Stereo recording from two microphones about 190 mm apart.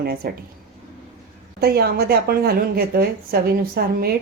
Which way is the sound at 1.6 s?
55° right (ahead or behind).